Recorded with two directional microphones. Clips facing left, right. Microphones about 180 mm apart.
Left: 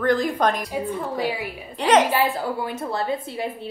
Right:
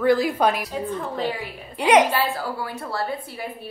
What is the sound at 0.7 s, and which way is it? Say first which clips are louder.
A woman's voice: left 1 dB; 10° left (ahead or behind).